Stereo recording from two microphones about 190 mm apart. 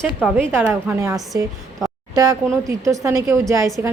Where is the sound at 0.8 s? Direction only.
15° right (ahead or behind).